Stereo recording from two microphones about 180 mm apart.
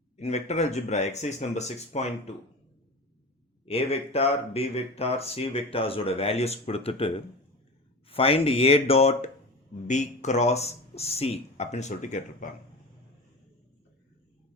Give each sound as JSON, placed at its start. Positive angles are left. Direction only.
{"t": 0.2, "sound": "speech", "side_deg": 40}
{"t": 3.7, "sound": "speech", "side_deg": 35}